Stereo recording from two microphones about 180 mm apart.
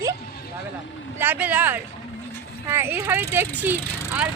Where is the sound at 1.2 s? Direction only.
10° right (ahead or behind).